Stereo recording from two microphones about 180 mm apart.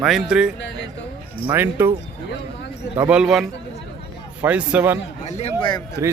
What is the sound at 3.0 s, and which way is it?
Speech, 5° right (ahead or behind).